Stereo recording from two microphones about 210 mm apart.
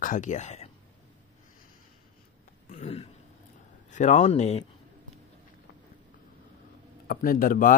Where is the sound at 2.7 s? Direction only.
30° left (ahead or behind).